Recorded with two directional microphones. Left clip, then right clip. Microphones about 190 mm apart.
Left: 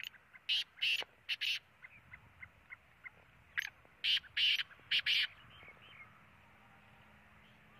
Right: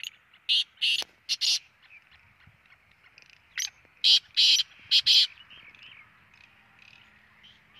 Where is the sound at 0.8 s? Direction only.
10° left (ahead or behind).